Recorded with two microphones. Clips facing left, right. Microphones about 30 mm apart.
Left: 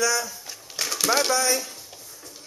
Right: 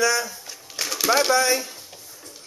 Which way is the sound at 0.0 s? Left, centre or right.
Centre.